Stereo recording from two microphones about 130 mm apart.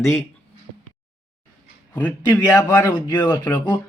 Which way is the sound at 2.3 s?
20° left (ahead or behind).